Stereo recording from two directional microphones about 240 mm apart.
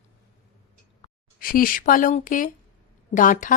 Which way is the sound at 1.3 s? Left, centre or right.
Left.